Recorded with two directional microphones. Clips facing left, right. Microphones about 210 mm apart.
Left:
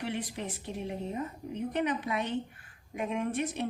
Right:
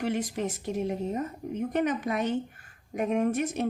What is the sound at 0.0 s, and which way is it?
A woman's voice, 45° right (ahead or behind).